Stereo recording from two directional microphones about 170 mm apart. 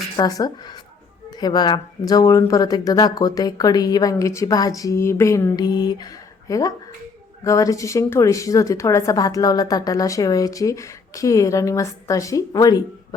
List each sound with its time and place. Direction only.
0.2 s a woman's voice: 20° left (ahead or behind)